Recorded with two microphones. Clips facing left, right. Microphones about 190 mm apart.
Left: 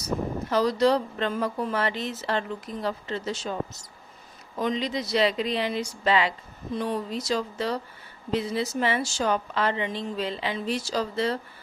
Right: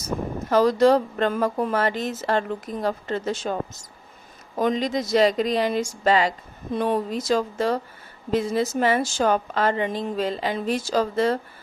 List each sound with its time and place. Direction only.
0.5 s speech: 50° right (ahead or behind)
6.7 s speech: 50° right (ahead or behind)